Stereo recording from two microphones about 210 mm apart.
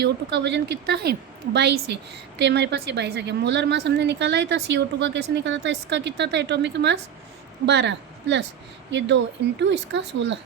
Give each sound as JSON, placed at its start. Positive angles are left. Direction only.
{"t": 0.0, "sound": "a woman's voice", "side_deg": -55}